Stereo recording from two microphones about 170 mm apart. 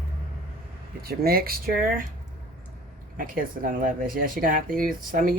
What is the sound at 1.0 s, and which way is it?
Speech, 65° right (ahead or behind).